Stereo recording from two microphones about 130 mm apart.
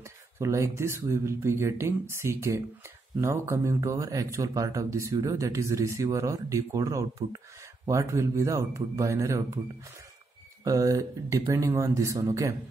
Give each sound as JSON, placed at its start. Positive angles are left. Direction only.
{"t": 0.4, "sound": "speech", "side_deg": -20}
{"t": 10.6, "sound": "speech", "side_deg": -25}